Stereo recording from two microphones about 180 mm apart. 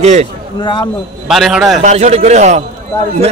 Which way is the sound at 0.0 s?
40° right (ahead or behind).